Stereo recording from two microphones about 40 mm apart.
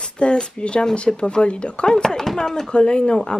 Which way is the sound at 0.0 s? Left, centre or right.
Left.